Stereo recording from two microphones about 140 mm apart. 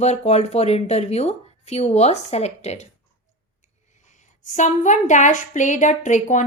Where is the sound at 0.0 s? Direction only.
50° left (ahead or behind).